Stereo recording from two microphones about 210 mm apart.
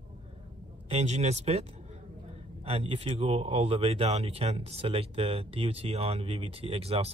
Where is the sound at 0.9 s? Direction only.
30° right (ahead or behind).